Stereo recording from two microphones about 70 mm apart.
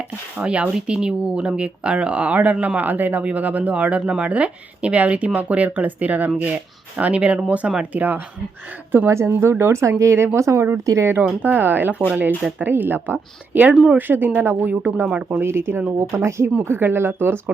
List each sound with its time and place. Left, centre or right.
0.3 s speech: centre
9.0 s speech: right
11.4 s speech: right
15.4 s speech: right